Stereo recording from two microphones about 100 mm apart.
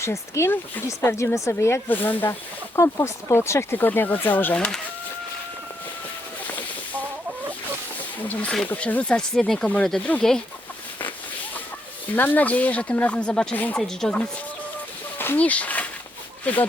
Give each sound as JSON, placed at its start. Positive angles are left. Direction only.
{"t": 0.0, "sound": "speech", "side_deg": 30}
{"t": 2.7, "sound": "speech", "side_deg": 30}
{"t": 4.5, "sound": "speech", "side_deg": 10}
{"t": 8.3, "sound": "speech", "side_deg": 15}
{"t": 12.1, "sound": "speech", "side_deg": 15}
{"t": 15.2, "sound": "speech", "side_deg": 20}